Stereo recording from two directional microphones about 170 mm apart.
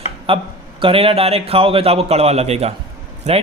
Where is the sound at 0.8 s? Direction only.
35° right (ahead or behind).